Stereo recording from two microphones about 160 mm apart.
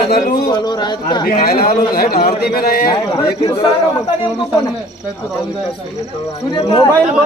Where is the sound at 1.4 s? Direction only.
70° left (ahead or behind).